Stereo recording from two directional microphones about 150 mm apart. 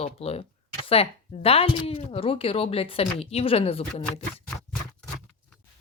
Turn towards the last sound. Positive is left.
turn(degrees=40)  # may be behind; listen again after turning